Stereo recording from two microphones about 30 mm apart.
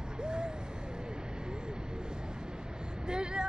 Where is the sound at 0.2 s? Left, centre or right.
Right.